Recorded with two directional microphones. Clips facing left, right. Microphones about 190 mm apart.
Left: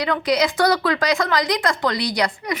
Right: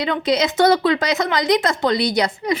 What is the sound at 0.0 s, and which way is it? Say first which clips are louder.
A woman's voice: right 1 dB; 25° right (ahead or behind).